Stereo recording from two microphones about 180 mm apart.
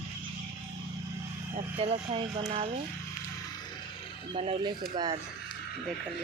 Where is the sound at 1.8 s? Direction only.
30° right (ahead or behind).